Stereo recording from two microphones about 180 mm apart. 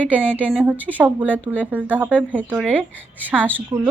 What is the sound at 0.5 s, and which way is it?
Speech, 5° right (ahead or behind).